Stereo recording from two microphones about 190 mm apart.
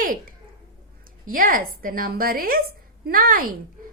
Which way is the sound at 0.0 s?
45° right (ahead or behind).